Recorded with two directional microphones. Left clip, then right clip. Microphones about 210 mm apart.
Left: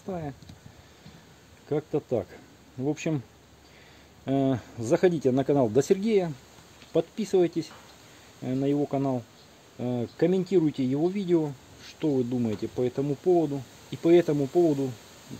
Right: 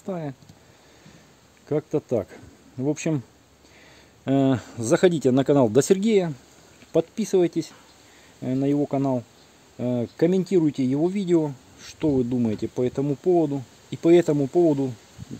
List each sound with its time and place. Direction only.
0.0 s speech: 45° right (ahead or behind)
1.7 s speech: 40° right (ahead or behind)
4.3 s speech: 50° right (ahead or behind)